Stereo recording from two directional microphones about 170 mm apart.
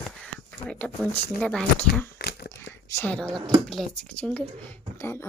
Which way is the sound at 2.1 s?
70° left (ahead or behind).